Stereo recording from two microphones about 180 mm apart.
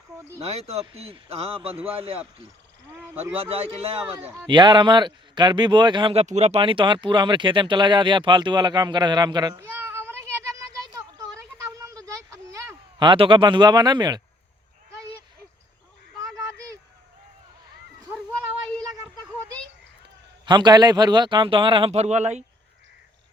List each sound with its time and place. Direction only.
0.3 s speech: 35° right (ahead or behind)
3.3 s speech: 35° right (ahead or behind)
6.2 s speech: 40° right (ahead or behind); by 10.2 s 15° right (ahead or behind)
11.8 s a sound: 20° right (ahead or behind)
20.4 s speech: 25° right (ahead or behind)